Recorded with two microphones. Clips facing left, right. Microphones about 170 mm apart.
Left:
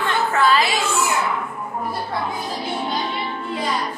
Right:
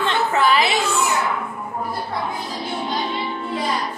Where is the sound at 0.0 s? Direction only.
20° right (ahead or behind).